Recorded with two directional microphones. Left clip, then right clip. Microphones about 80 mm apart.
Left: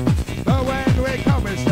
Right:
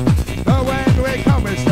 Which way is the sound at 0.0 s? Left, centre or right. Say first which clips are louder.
Right 3 dB; right.